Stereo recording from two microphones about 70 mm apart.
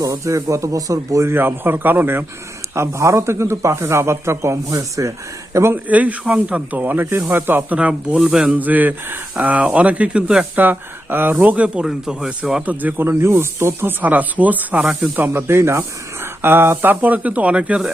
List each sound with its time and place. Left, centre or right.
0.0 s speech: right
1.3 s speech: right
2.7 s speech: right
4.7 s speech: right
5.5 s speech: right
5.9 s speech: right
7.8 s speech: centre
10.6 s speech: right; by 12.6 s centre
12.6 s speech: right
13.1 s speech: right
14.0 s speech: right